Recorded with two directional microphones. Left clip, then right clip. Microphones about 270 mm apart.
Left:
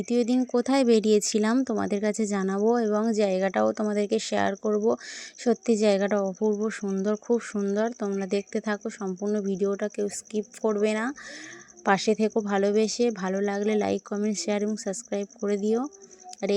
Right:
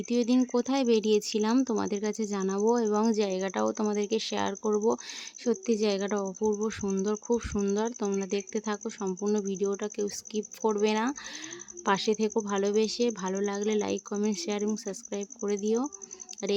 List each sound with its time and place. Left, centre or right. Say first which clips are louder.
0.0 s speech: left 2 dB; centre